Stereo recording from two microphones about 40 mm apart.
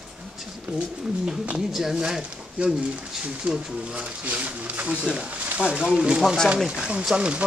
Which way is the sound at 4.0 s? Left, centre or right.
Right.